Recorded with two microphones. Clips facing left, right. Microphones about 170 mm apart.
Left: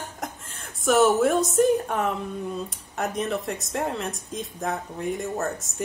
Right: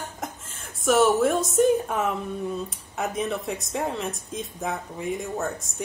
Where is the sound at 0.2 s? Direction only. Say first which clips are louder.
Even; centre (ahead or behind).